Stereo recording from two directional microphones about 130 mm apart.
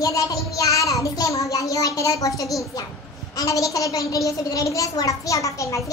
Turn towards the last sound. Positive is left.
turn(degrees=25)  # may be behind; listen again after turning